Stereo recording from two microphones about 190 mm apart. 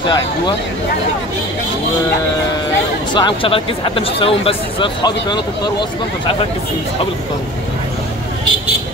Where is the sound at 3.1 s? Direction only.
25° left (ahead or behind).